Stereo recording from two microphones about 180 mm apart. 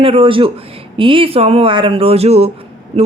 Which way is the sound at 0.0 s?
30° right (ahead or behind).